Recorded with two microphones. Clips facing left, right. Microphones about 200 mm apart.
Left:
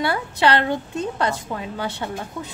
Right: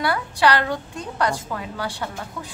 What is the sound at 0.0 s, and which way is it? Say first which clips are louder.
A woman's voice: even; 25° left (ahead or behind).